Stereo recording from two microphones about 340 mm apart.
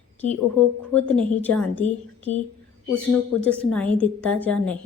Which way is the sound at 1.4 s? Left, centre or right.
Centre.